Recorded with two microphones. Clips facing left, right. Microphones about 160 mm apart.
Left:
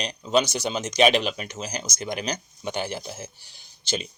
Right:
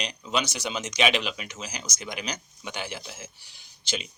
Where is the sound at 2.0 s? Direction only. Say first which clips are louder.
Left 5 dB; 40° left (ahead or behind).